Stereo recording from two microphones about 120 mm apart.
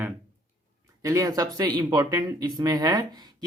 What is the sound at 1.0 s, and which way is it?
Speech, 30° right (ahead or behind).